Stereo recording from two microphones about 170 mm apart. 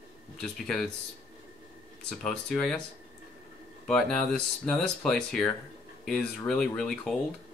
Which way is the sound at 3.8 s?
5° left (ahead or behind).